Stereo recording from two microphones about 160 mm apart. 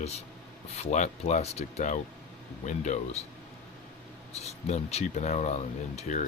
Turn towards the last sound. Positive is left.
turn(degrees=50)  # may be behind; listen again after turning